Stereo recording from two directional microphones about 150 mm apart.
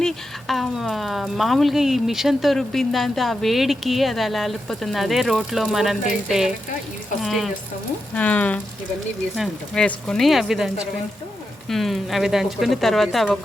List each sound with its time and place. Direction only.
0.0 s speech: centre (ahead or behind)
8.1 s speech: 10° left (ahead or behind)
11.7 s speech: centre (ahead or behind)